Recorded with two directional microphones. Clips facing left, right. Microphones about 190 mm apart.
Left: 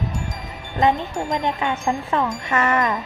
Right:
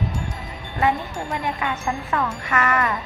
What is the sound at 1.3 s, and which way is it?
Chime, 25° left (ahead or behind).